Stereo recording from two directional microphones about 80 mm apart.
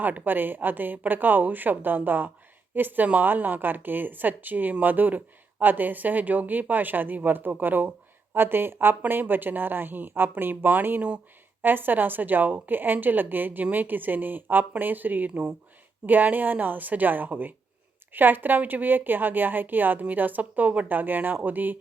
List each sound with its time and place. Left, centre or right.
0.0 s a woman's voice: right
15.3 s speech: centre
16.0 s a woman's voice: right